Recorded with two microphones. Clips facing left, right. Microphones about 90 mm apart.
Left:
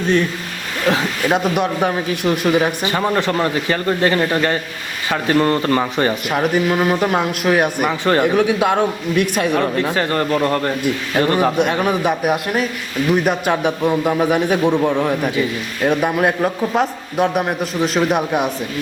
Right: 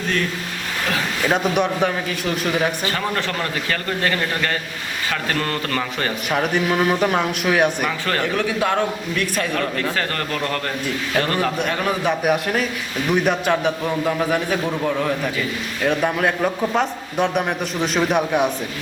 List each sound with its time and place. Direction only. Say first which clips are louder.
1.3 s a man's voice: left 1 dB; 5° left (ahead or behind); by 6.1 s 25° left (ahead or behind)
6.3 s a man's voice: left 1 dB; 5° left (ahead or behind)
7.9 s a man's voice: left 7 dB; 25° left (ahead or behind)
12.2 s a man's voice: left 1 dB; 5° left (ahead or behind)
13.5 s a man's voice: left 3 dB; 15° left (ahead or behind)
16.4 s a man's voice: left 2 dB; 5° left (ahead or behind)